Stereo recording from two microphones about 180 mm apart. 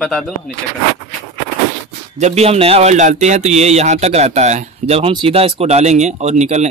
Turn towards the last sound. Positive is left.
turn(degrees=-40)  # may be behind; listen again after turning